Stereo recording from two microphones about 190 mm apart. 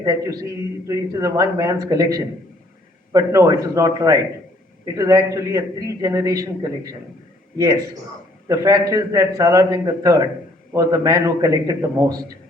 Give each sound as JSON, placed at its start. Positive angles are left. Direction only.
{"t": 0.0, "sound": "a man's voice", "side_deg": -20}
{"t": 3.1, "sound": "a man's voice", "side_deg": -15}
{"t": 8.4, "sound": "a man's voice", "side_deg": -20}